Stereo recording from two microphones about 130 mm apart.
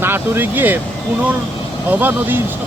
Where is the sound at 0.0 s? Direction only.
15° right (ahead or behind).